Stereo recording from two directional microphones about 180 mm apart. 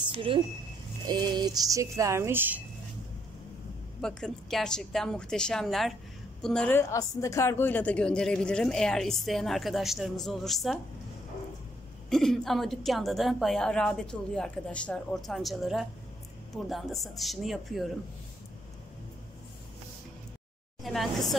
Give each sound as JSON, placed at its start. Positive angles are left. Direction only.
{"t": 0.0, "sound": "a sound", "side_deg": -30}
{"t": 1.0, "sound": "speech", "side_deg": -25}
{"t": 4.0, "sound": "a woman's voice", "side_deg": 0}
{"t": 12.1, "sound": "a woman's voice", "side_deg": 0}
{"t": 20.8, "sound": "a woman's voice", "side_deg": 0}